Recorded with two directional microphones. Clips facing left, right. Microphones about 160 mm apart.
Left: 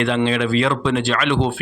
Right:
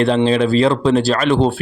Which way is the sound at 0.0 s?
35° right (ahead or behind).